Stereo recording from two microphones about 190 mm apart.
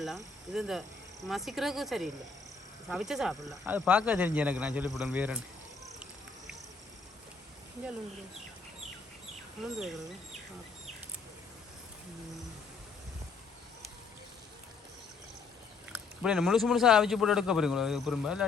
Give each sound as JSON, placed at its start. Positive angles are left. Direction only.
{"t": 0.0, "sound": "a man's voice", "side_deg": 0}
{"t": 9.7, "sound": "a man's voice", "side_deg": 0}
{"t": 15.9, "sound": "a man's voice", "side_deg": -5}